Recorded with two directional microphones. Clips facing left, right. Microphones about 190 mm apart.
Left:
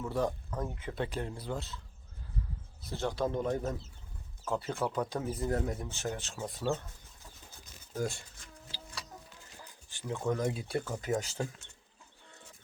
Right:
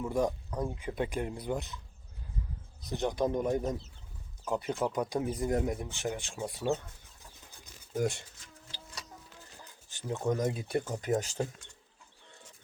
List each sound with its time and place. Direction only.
0.0 s speech: 15° right (ahead or behind)
2.8 s speech: 15° right (ahead or behind)
10.0 s speech: 20° right (ahead or behind)